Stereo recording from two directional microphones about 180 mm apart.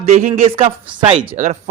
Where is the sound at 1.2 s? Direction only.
50° right (ahead or behind).